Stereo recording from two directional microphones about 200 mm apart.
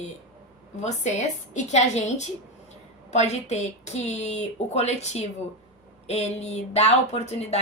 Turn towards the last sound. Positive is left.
turn(degrees=35)  # may be behind; listen again after turning